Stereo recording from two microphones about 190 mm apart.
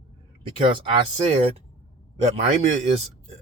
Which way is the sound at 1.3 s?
35° right (ahead or behind).